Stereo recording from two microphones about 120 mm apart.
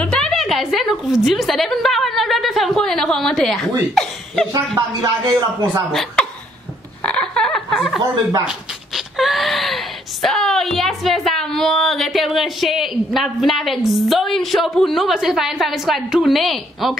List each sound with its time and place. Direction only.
0.0 s a woman's voice: 5° left (ahead or behind)
4.5 s speech: 30° right (ahead or behind)
7.0 s a sound: 10° left (ahead or behind)
8.5 s speech: centre (ahead or behind)